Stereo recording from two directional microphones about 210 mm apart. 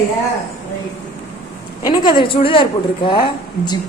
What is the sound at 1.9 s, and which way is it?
A woman's voice, 20° left (ahead or behind).